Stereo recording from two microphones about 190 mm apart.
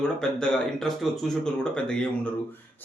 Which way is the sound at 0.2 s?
5° left (ahead or behind).